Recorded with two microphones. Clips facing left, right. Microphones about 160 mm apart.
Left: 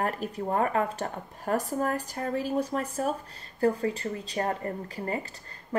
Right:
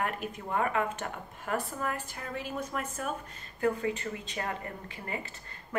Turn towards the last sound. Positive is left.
turn(degrees=35)  # may be behind; listen again after turning